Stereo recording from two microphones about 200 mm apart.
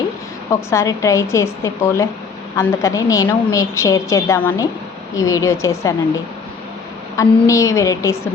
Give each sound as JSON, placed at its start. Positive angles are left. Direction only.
{"t": 0.5, "sound": "a woman's voice", "side_deg": 15}
{"t": 7.2, "sound": "a woman's voice", "side_deg": 15}